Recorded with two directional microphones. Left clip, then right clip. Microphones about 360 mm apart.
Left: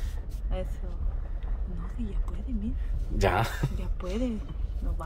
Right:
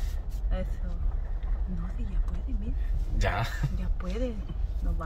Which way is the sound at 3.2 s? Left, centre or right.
Centre.